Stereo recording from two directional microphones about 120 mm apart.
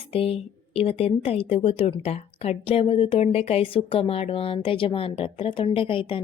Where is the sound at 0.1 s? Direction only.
55° left (ahead or behind).